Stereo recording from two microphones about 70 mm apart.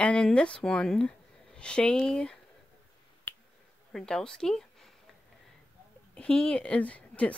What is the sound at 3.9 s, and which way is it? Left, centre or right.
Speech, centre.